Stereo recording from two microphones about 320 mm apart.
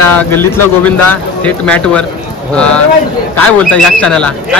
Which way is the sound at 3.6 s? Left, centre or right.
Centre.